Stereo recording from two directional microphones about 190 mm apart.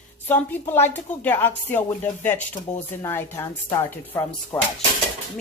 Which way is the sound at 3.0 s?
15° left (ahead or behind).